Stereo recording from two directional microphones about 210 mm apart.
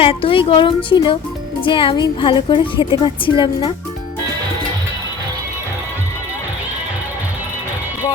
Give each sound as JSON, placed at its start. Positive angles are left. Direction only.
{"t": 0.0, "sound": "a woman's voice", "side_deg": 25}